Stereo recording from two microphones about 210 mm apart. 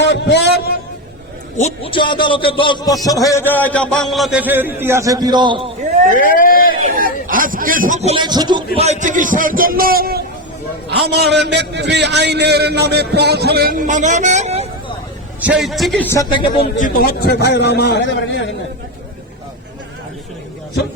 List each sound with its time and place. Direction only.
0.0 s a sound: 55° left (ahead or behind)
1.5 s a man's voice: 30° left (ahead or behind); by 5.7 s 25° right (ahead or behind)
6.1 s speech: 40° left (ahead or behind)
6.9 s a man's voice: 40° right (ahead or behind)
15.4 s a man's voice: 5° right (ahead or behind)
16.3 s a man's voice: 25° left (ahead or behind)
16.7 s a man's voice: 40° left (ahead or behind); by 18.5 s 60° left (ahead or behind)